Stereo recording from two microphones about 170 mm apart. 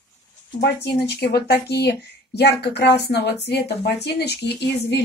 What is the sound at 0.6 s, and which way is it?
Speech, 75° left (ahead or behind).